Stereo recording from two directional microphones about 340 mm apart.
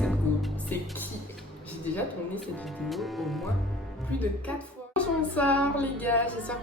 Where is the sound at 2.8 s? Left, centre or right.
Centre.